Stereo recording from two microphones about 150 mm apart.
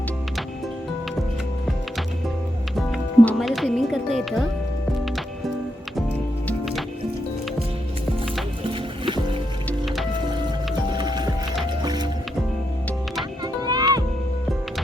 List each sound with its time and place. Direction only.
3.2 s speech: centre (ahead or behind)
8.6 s music: 35° right (ahead or behind)
9.6 s music: centre (ahead or behind)
10.9 s music: 30° right (ahead or behind)
13.4 s music: 25° right (ahead or behind)